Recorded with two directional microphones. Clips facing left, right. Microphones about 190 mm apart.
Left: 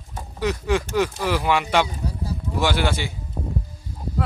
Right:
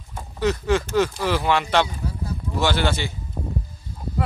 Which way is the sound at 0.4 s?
10° left (ahead or behind).